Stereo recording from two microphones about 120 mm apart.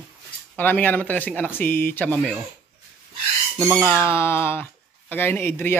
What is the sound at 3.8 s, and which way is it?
Speech, 10° left (ahead or behind).